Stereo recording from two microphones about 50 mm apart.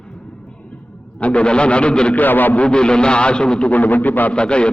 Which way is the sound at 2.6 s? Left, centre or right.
Centre.